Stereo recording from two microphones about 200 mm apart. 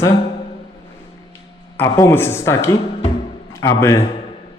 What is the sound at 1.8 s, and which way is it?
Speech, 10° left (ahead or behind).